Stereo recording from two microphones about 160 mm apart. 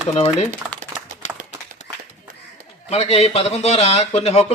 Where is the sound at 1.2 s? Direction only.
45° left (ahead or behind).